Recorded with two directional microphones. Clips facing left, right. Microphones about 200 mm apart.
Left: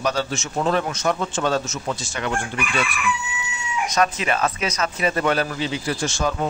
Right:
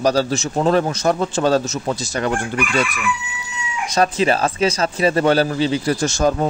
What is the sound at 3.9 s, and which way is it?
A man's voice, 30° right (ahead or behind).